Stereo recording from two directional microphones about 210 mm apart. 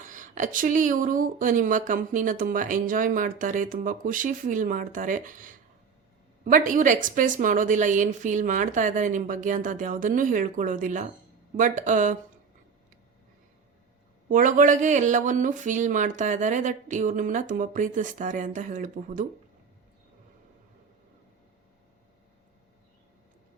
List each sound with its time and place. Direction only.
0.0 s speech: 40° right (ahead or behind)
14.3 s speech: 40° right (ahead or behind)